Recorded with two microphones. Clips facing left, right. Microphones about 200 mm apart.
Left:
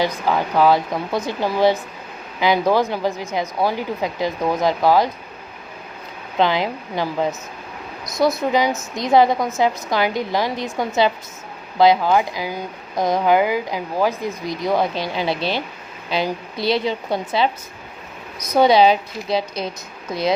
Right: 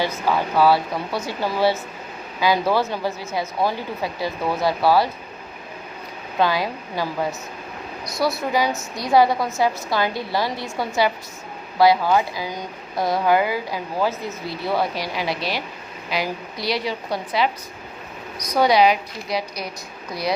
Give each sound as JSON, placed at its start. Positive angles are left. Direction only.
{"t": 0.0, "sound": "speech", "side_deg": 15}
{"t": 6.4, "sound": "a woman's voice", "side_deg": 20}